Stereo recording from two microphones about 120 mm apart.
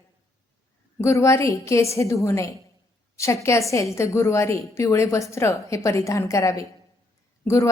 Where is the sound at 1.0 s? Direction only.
25° left (ahead or behind).